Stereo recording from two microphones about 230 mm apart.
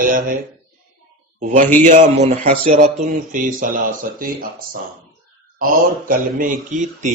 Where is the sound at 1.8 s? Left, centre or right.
Right.